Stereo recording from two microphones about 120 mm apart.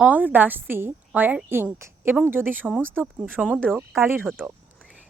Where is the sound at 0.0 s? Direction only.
15° right (ahead or behind).